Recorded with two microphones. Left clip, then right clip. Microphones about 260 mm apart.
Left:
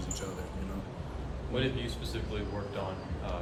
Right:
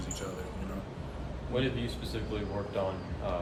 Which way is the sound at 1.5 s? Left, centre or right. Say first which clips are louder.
Right 1 dB; right.